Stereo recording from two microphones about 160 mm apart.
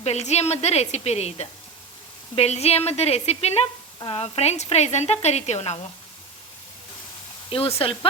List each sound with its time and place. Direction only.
0.0 s a woman's voice: 40° left (ahead or behind)
7.5 s speech: 35° left (ahead or behind)